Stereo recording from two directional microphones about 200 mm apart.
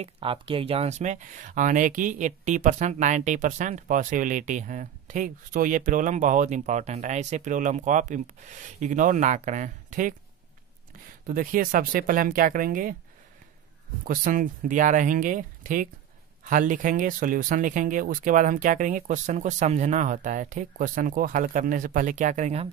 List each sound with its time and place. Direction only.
0.0 s speech: 25° right (ahead or behind)
11.2 s speech: 45° right (ahead or behind)
14.0 s speech: 45° right (ahead or behind)